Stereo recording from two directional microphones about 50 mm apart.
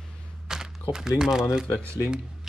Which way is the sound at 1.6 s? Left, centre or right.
Left.